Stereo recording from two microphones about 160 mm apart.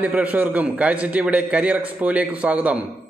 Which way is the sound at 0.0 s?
10° right (ahead or behind).